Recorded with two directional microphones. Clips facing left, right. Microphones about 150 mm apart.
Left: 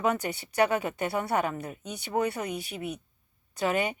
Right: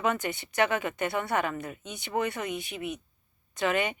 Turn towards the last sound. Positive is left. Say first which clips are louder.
# even
turn(degrees=40)  # may be behind; listen again after turning